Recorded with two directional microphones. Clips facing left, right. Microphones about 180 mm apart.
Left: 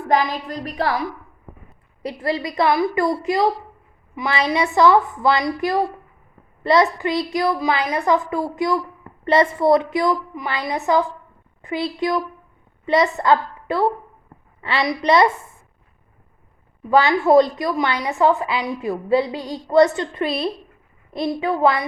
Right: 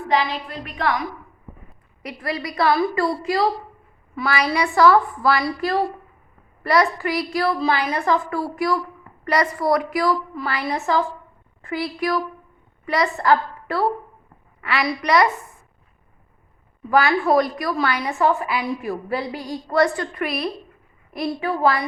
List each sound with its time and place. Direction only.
0.1 s a woman's voice: 45° left (ahead or behind); by 15.3 s 25° left (ahead or behind)
16.9 s a woman's voice: 20° left (ahead or behind)